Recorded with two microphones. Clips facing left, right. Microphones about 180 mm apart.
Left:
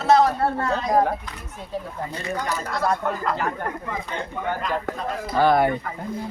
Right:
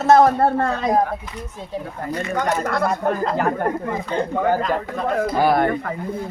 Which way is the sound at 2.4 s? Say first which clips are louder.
Right 9 dB; 60° right (ahead or behind).